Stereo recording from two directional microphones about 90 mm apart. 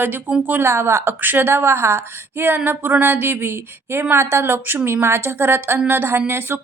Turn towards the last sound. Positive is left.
turn(degrees=-25)  # may be behind; listen again after turning